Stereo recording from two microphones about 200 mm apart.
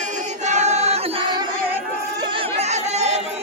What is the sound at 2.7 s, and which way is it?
Chatter, 35° right (ahead or behind).